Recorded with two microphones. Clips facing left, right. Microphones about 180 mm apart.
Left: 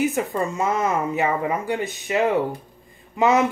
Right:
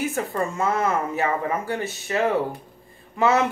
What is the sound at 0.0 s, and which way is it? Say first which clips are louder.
Speech: left 3 dB; 20° left (ahead or behind).